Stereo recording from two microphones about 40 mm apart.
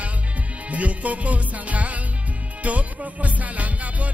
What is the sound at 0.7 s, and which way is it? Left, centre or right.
Music, right.